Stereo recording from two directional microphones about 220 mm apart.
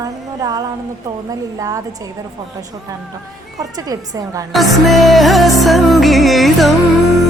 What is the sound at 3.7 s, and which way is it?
Speech, 15° right (ahead or behind).